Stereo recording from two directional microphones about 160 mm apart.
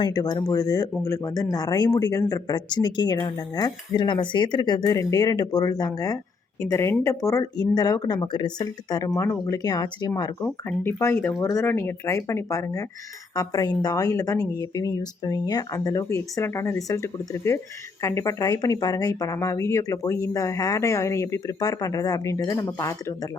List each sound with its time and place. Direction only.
0.0 s speech: 25° left (ahead or behind)